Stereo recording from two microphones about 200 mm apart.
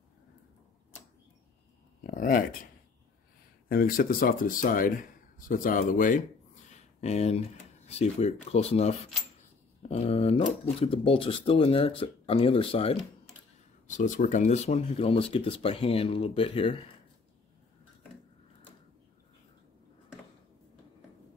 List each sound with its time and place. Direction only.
2.0 s speech: 45° left (ahead or behind); by 16.7 s 30° left (ahead or behind)